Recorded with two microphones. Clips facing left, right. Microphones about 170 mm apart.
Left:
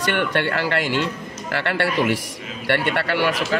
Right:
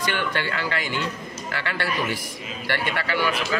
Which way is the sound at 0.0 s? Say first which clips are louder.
Left 5 dB; 65° left (ahead or behind).